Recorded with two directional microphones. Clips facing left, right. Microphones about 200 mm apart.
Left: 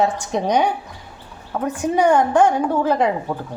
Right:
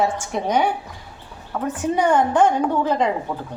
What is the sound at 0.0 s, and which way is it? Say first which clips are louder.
A woman's voice: left 2 dB; 20° left (ahead or behind).